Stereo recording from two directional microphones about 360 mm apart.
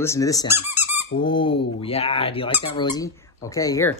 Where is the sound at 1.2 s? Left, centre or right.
Centre.